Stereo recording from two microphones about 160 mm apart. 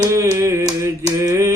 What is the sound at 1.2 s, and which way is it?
Mantra, 20° right (ahead or behind).